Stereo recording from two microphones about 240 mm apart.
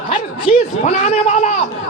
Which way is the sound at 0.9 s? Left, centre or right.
Left.